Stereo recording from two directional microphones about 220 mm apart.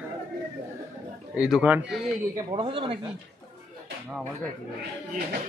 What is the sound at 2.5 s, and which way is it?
Speech, 20° right (ahead or behind).